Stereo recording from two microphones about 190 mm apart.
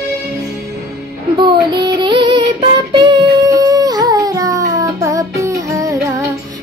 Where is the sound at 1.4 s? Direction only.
25° right (ahead or behind).